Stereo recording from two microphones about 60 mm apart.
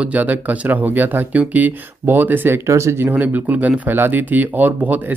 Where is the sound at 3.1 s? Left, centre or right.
Right.